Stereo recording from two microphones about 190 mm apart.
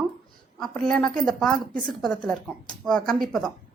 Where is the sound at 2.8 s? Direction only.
5° left (ahead or behind).